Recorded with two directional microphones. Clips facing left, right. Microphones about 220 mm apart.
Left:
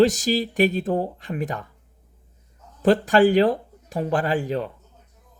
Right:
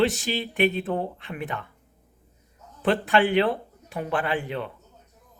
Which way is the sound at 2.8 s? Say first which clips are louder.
Left 5 dB; 40° left (ahead or behind).